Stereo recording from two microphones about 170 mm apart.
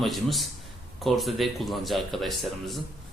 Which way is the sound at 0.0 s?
Centre (ahead or behind).